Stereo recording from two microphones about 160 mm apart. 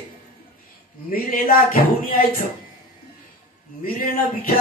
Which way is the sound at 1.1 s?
65° left (ahead or behind).